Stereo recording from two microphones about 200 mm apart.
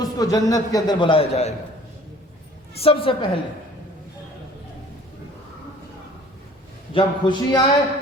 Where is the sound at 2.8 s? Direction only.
25° left (ahead or behind).